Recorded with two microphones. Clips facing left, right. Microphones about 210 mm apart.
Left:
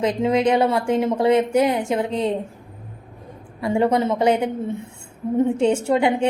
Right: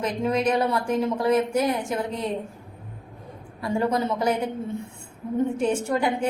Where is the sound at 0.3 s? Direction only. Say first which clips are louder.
Left 4 dB; 25° left (ahead or behind).